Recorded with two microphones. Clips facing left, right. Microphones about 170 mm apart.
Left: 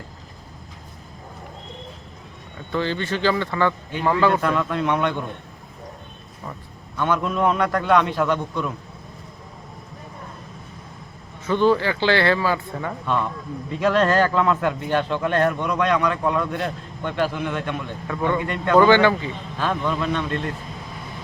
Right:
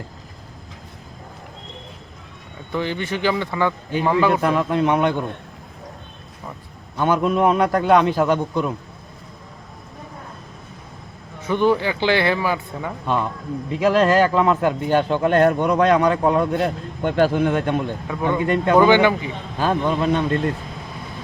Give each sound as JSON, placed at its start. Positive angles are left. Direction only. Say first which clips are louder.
{"t": 2.7, "sound": "speech", "louder": "even", "side_deg": -15}
{"t": 6.9, "sound": "a man's voice", "louder": "right 3 dB", "side_deg": -35}
{"t": 7.2, "sound": "a man's voice", "louder": "right 5 dB", "side_deg": -20}
{"t": 11.4, "sound": "speech", "louder": "even", "side_deg": -15}
{"t": 14.3, "sound": "speech", "louder": "right 3 dB", "side_deg": -25}
{"t": 15.5, "sound": "speech", "louder": "right 5 dB", "side_deg": -25}
{"t": 17.0, "sound": "a man's voice", "louder": "right 6 dB", "side_deg": -45}
{"t": 18.1, "sound": "speech", "louder": "right 3 dB", "side_deg": -15}
{"t": 19.5, "sound": "speech", "louder": "right 4 dB", "side_deg": -35}